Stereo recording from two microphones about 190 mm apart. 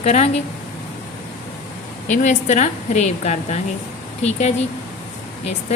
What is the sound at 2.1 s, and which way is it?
A woman's voice, 40° left (ahead or behind).